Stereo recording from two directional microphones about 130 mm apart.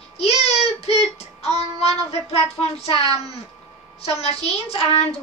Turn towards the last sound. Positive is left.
turn(degrees=50)  # may be behind; listen again after turning